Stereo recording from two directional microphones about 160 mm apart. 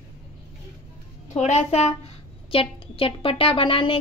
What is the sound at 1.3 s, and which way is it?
A woman's voice, 45° left (ahead or behind).